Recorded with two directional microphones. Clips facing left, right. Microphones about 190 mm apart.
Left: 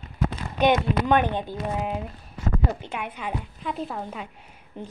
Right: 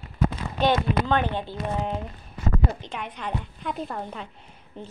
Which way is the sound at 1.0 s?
15° left (ahead or behind).